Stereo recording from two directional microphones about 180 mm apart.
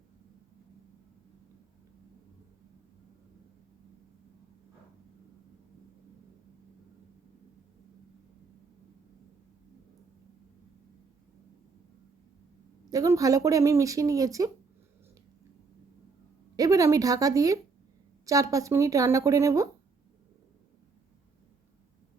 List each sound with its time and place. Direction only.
12.9 s speech: 20° right (ahead or behind)
16.6 s a woman's voice: 20° right (ahead or behind)